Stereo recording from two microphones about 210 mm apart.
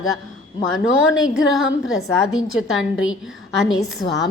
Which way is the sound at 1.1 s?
Centre (ahead or behind).